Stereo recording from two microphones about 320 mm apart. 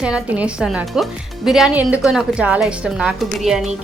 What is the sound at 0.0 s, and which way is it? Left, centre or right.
A woman's voice, centre.